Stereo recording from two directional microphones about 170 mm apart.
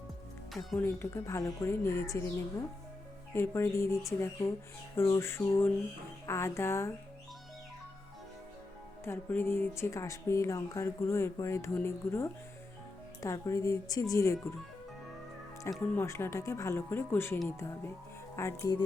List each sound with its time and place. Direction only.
0.8 s speech: 15° left (ahead or behind)
3.3 s speech: 15° left (ahead or behind)
9.0 s speech: 15° left (ahead or behind)
15.8 s speech: 15° left (ahead or behind)